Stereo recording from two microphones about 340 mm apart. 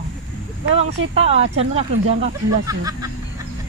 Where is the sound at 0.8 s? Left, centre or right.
Centre.